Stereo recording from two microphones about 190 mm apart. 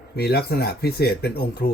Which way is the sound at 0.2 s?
60° left (ahead or behind).